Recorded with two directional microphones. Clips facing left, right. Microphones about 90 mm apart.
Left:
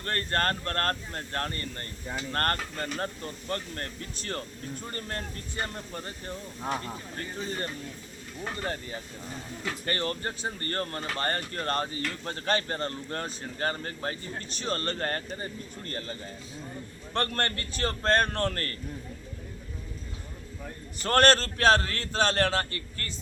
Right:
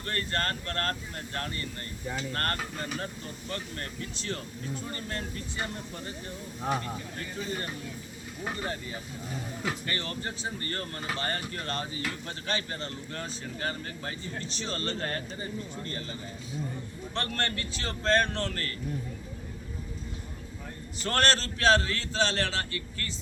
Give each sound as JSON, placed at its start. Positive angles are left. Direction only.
{"t": 0.0, "sound": "speech", "side_deg": 45}
{"t": 9.8, "sound": "speech", "side_deg": 40}
{"t": 17.2, "sound": "speech", "side_deg": 45}
{"t": 21.0, "sound": "speech", "side_deg": 50}